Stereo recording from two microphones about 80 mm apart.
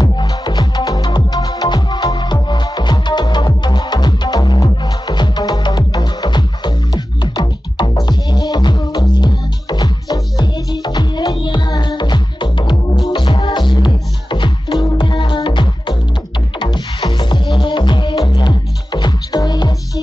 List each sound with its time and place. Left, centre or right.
0.0 s music: left
13.1 s music: left
16.5 s music: left